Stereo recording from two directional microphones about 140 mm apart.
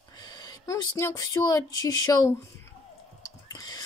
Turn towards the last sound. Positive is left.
turn(degrees=25)  # may be behind; listen again after turning